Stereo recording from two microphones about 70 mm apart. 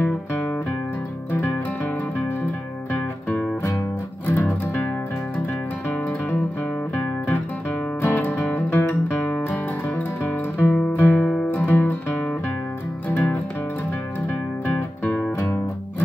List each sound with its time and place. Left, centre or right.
2.9 s music: left
8.0 s music: left
13.1 s music: left
15.0 s music: centre